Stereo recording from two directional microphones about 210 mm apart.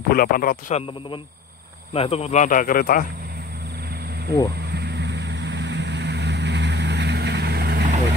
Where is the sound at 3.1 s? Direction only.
45° right (ahead or behind).